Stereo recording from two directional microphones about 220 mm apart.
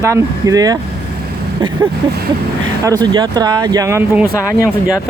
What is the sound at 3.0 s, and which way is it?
Speech, 20° right (ahead or behind).